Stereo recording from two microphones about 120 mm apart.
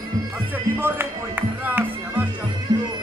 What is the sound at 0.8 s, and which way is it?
Music, 15° right (ahead or behind).